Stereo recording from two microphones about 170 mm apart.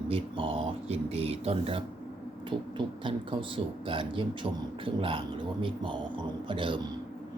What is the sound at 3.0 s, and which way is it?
Speech, 30° right (ahead or behind).